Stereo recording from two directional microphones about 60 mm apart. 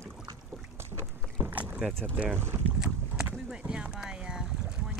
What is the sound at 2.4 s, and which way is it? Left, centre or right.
Boat, right.